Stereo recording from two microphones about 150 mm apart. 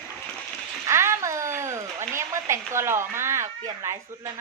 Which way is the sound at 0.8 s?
20° right (ahead or behind).